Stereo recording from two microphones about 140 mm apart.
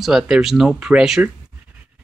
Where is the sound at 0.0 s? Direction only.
5° right (ahead or behind).